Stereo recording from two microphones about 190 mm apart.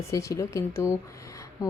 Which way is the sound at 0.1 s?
15° left (ahead or behind).